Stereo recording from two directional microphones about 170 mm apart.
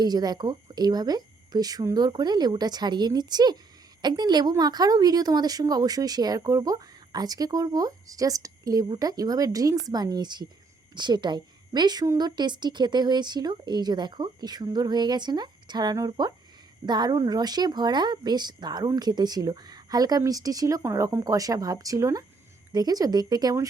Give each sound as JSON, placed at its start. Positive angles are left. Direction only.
{"t": 0.0, "sound": "speech", "side_deg": -25}